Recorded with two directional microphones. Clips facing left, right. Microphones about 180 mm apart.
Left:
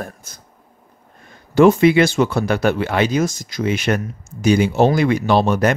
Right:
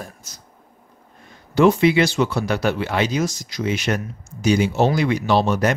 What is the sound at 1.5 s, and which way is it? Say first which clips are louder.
Speech: left 4 dB; 50° left (ahead or behind).